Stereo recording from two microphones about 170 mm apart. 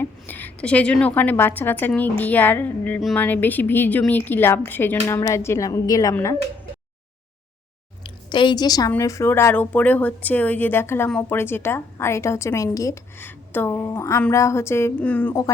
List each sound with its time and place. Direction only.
0.0 s a woman's voice: 10° left (ahead or behind)
8.0 s a woman's voice: 25° left (ahead or behind); by 15.4 s 10° left (ahead or behind)